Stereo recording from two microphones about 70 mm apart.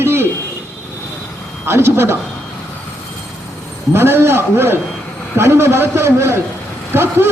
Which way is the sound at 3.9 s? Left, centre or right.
Right.